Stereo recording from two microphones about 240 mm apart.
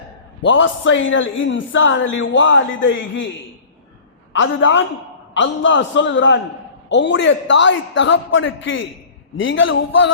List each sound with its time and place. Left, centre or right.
0.4 s a man's voice: left
4.3 s a man's voice: left